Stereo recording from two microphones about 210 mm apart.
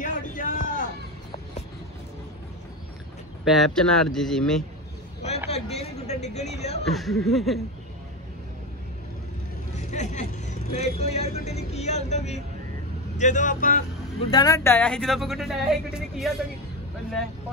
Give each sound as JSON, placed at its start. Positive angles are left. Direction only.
{"t": 0.0, "sound": "a sound", "side_deg": 40}
{"t": 3.4, "sound": "speech", "side_deg": 0}
{"t": 5.5, "sound": "speech", "side_deg": 30}
{"t": 6.8, "sound": "speech", "side_deg": 0}
{"t": 9.8, "sound": "speech", "side_deg": 35}
{"t": 14.3, "sound": "speech", "side_deg": 15}